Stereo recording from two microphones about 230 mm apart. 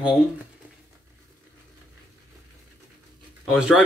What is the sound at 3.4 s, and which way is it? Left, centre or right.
Speech, centre.